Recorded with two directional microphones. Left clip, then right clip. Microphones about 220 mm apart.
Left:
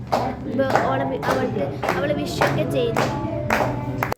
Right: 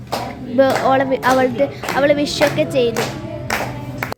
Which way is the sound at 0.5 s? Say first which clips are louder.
Right 7 dB; 30° right (ahead or behind).